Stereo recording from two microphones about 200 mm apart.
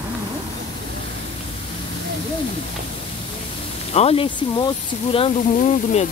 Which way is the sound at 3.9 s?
30° left (ahead or behind).